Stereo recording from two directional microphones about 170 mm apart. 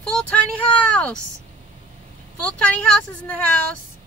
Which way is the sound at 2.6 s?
5° left (ahead or behind).